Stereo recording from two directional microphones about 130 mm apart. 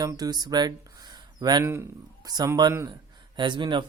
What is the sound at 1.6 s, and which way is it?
Speech, 20° right (ahead or behind).